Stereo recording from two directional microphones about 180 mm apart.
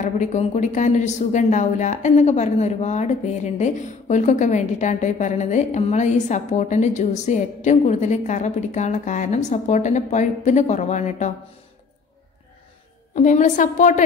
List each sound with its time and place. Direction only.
0.0 s a woman's voice: 40° left (ahead or behind)
13.1 s a woman's voice: 40° left (ahead or behind)